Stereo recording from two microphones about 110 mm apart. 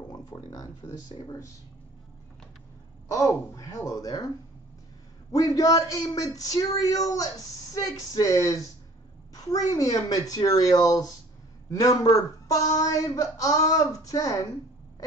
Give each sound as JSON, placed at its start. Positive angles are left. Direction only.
{"t": 0.1, "sound": "speech", "side_deg": 35}
{"t": 3.1, "sound": "speech", "side_deg": 30}
{"t": 5.3, "sound": "speech", "side_deg": 30}